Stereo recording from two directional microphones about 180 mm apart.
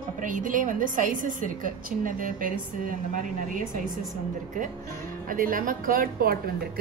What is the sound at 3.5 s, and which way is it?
Speech, 45° right (ahead or behind).